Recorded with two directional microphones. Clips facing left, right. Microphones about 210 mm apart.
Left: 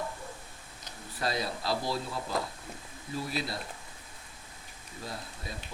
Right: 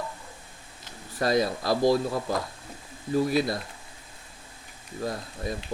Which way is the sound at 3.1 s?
45° right (ahead or behind).